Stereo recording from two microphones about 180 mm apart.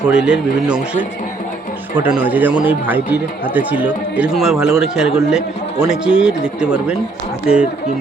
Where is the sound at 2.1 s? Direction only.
10° right (ahead or behind).